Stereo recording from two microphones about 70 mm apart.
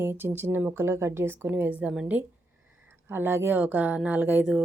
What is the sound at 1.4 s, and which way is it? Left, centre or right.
Speech, right.